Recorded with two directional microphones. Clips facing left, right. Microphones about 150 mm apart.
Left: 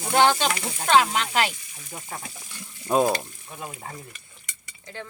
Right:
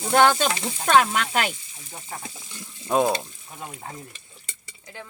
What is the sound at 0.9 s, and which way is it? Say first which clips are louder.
Speech: right 1 dB; 45° right (ahead or behind).